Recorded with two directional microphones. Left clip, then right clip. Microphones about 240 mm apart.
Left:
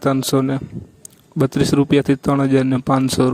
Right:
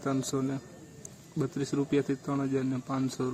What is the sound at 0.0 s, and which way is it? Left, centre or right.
Speech, left.